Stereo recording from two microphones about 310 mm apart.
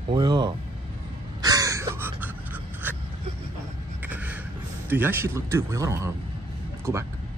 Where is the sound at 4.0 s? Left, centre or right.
Centre.